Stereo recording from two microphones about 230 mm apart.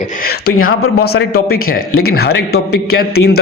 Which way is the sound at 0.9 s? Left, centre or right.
Left.